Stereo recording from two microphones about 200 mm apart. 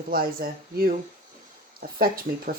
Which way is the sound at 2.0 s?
45° right (ahead or behind).